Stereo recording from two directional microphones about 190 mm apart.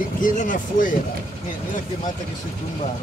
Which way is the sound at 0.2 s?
45° left (ahead or behind).